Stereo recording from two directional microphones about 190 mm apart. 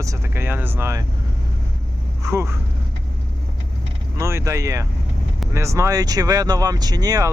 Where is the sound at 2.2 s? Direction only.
15° right (ahead or behind).